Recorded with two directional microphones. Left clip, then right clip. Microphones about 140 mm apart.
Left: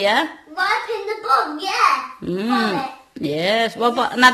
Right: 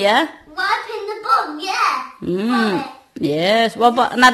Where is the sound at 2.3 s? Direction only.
25° right (ahead or behind).